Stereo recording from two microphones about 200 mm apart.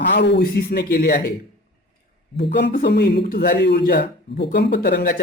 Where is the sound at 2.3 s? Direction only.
55° left (ahead or behind).